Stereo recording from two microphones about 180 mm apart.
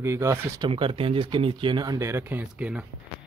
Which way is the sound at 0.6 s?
30° right (ahead or behind).